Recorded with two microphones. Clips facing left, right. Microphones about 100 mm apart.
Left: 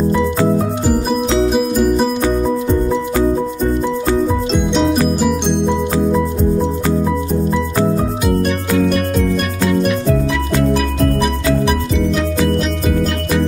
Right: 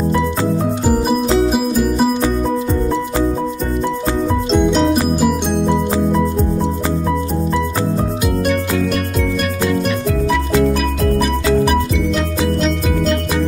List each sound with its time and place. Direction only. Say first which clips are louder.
4.5 s music: right 1 dB; centre (ahead or behind)